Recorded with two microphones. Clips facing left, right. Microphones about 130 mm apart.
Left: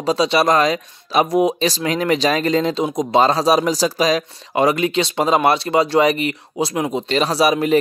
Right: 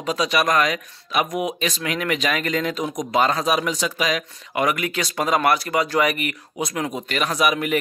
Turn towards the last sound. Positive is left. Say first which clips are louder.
# left 5 dB
turn(degrees=30)  # may be behind; listen again after turning